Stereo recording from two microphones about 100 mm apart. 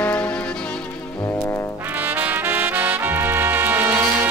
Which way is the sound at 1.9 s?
20° right (ahead or behind).